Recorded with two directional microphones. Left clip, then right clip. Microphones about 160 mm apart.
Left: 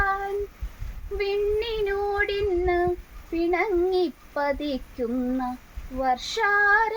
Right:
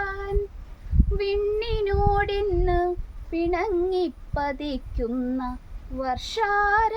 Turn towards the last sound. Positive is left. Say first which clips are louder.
# left 1 dB
turn(degrees=-30)  # may be behind; listen again after turning